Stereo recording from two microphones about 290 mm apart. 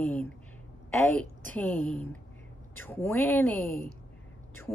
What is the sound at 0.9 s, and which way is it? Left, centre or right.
A woman's voice, centre.